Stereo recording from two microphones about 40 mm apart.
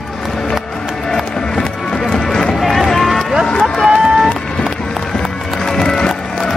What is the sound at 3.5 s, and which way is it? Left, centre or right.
Run, left.